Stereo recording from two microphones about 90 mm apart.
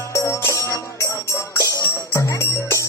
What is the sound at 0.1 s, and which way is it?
Music, 35° left (ahead or behind).